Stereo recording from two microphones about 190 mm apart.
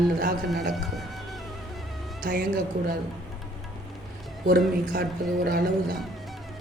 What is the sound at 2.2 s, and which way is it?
Speech, 50° right (ahead or behind).